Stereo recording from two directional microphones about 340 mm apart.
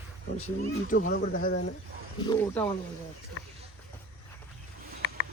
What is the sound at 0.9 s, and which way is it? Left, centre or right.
Speech, left.